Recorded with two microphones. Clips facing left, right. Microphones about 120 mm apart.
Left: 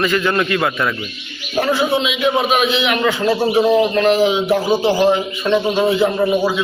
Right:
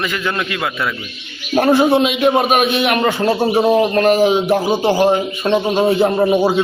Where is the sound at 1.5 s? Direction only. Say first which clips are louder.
Right 5 dB; 45° right (ahead or behind).